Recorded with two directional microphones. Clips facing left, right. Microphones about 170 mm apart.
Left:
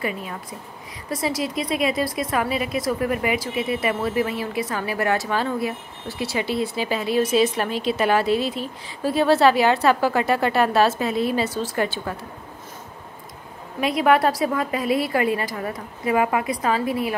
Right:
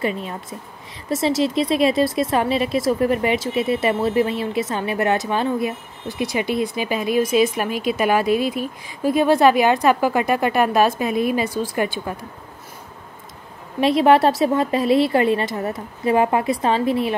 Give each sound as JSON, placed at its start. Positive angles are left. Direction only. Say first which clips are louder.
{"t": 0.0, "sound": "a woman's voice", "louder": "right 4 dB", "side_deg": -25}
{"t": 13.7, "sound": "a woman's voice", "louder": "right 4 dB", "side_deg": -30}